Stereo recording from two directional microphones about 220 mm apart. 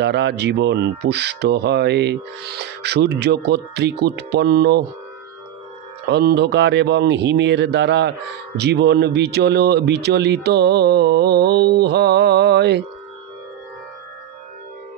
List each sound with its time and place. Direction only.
0.0 s speech: 50° right (ahead or behind)
6.0 s speech: 50° right (ahead or behind)